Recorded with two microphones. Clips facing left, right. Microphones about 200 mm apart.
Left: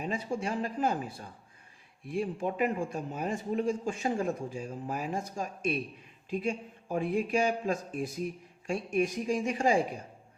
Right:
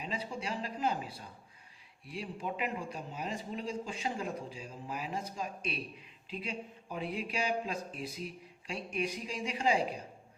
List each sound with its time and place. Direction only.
0.0 s a man's voice: 50° left (ahead or behind)